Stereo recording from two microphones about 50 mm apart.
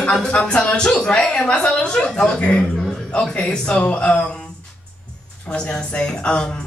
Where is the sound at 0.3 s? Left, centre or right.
Left.